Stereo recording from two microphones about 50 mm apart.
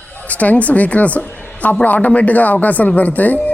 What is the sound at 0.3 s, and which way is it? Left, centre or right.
Speech, left.